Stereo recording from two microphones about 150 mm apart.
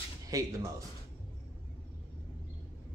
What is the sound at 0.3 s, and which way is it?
Speech, 25° right (ahead or behind).